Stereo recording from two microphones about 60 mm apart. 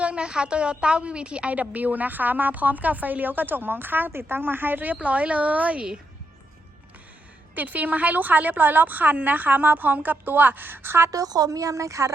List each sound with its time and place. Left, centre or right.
0.0 s a woman's voice: centre
7.5 s a woman's voice: right
11.1 s a woman's voice: right